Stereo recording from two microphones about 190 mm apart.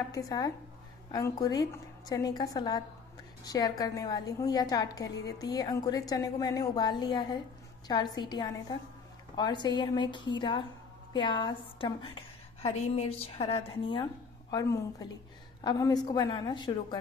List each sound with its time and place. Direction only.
0.1 s a woman's voice: 20° left (ahead or behind)